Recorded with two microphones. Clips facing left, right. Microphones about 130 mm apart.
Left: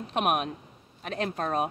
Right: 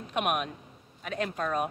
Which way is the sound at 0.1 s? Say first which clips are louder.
Left 2 dB; 35° left (ahead or behind).